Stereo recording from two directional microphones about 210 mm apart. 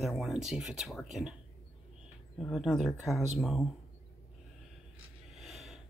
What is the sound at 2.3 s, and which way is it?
Speech, centre (ahead or behind).